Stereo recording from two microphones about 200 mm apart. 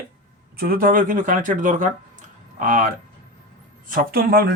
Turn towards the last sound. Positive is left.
turn(degrees=-45)  # may be behind; listen again after turning